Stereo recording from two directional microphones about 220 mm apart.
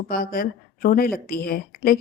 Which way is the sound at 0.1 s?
40° left (ahead or behind).